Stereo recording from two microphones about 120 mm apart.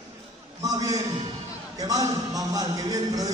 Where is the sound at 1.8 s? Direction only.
30° right (ahead or behind).